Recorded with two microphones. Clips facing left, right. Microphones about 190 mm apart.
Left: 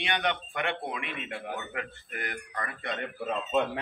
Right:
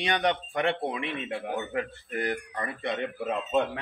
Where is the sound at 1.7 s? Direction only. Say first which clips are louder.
Right 6 dB; 35° right (ahead or behind).